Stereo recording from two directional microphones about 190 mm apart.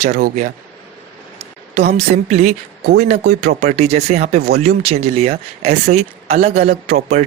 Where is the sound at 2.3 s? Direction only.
35° right (ahead or behind).